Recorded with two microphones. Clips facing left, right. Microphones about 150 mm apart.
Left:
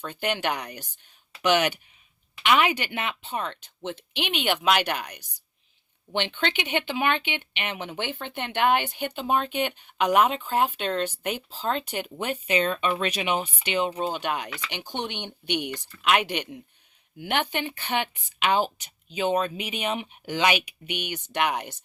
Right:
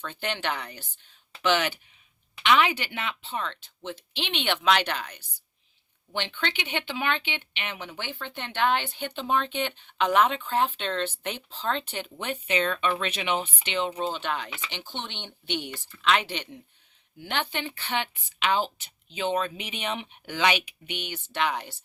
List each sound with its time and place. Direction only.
0.1 s speech: 10° left (ahead or behind)